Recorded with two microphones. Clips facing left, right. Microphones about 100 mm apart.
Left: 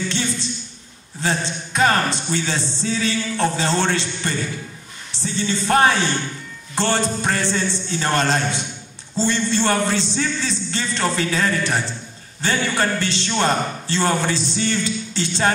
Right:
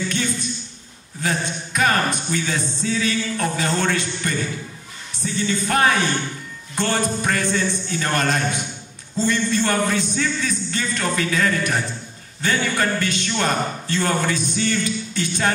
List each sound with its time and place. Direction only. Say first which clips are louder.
0.1 s a sound: even; 30° left (ahead or behind)
1.2 s music: left 1 dB; 30° left (ahead or behind)
12.4 s speech: left 1 dB; 30° left (ahead or behind)
13.0 s music: left 2 dB; 30° left (ahead or behind)